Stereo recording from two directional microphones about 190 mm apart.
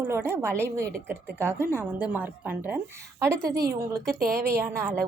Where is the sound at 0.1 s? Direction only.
10° right (ahead or behind).